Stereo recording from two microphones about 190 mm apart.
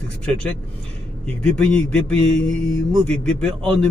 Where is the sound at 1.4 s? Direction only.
5° left (ahead or behind).